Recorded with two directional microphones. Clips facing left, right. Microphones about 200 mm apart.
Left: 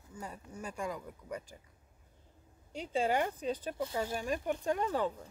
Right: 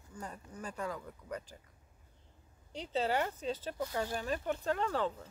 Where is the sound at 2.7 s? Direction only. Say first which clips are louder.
Left 2 dB; 10° left (ahead or behind).